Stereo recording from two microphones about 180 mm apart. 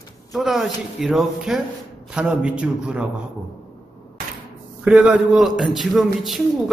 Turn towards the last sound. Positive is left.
turn(degrees=0)  # may be behind; listen again after turning